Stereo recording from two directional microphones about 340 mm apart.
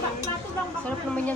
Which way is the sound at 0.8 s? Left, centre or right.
Centre.